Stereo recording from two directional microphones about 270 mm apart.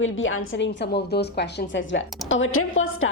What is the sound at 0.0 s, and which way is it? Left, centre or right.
A woman's voice, left.